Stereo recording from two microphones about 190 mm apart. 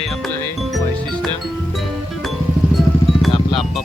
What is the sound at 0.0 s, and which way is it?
Music, centre (ahead or behind).